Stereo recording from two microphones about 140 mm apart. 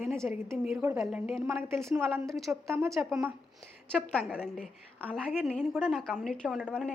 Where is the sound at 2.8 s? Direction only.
Centre (ahead or behind).